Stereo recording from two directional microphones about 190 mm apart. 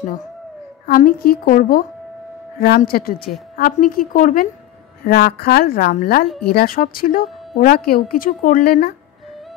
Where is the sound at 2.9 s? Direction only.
50° left (ahead or behind).